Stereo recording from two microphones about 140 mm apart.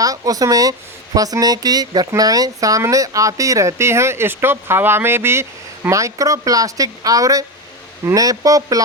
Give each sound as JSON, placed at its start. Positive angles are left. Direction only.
{"t": 0.0, "sound": "speech", "side_deg": -25}